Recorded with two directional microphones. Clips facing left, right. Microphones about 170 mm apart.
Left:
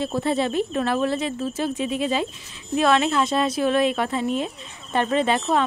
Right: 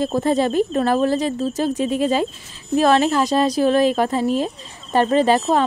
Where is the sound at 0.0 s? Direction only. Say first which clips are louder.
Right 5 dB; 45° right (ahead or behind).